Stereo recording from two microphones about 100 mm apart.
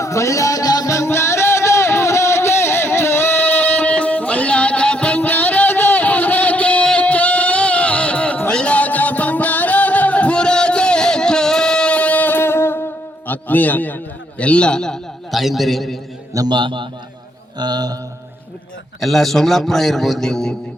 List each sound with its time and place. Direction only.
0.0 s music: 30° left (ahead or behind); by 16.0 s centre (ahead or behind)
16.5 s a man's voice: 55° right (ahead or behind)
17.6 s mantra: 45° right (ahead or behind)
18.9 s a man's voice: centre (ahead or behind)